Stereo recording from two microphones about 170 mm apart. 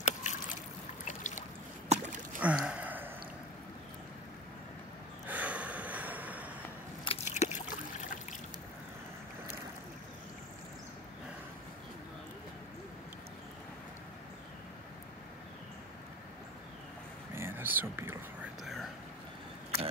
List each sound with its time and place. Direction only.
0.0 s boat: 45° left (ahead or behind)
1.9 s rowboat: 45° right (ahead or behind)
2.4 s gasp: 5° right (ahead or behind)
5.2 s gasp: 10° right (ahead or behind)
7.1 s a sound: 40° left (ahead or behind)
17.3 s whispering: 15° right (ahead or behind)
18.6 s whispering: centre (ahead or behind)